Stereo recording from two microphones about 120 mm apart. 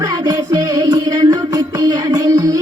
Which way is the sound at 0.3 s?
30° right (ahead or behind).